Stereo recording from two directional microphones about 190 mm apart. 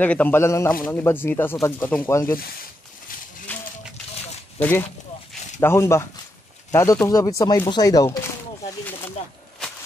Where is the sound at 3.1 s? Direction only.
45° left (ahead or behind).